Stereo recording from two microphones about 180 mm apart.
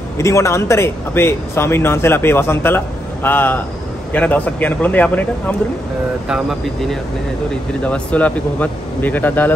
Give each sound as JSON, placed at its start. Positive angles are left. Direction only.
{"t": 0.2, "sound": "speech", "side_deg": 15}
{"t": 6.2, "sound": "speech", "side_deg": 0}